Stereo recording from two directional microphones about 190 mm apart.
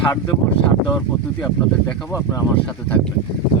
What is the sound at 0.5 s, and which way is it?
Speech, 20° left (ahead or behind).